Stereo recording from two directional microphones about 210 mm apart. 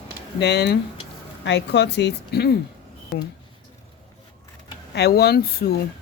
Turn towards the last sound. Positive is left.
turn(degrees=50)  # may be behind; listen again after turning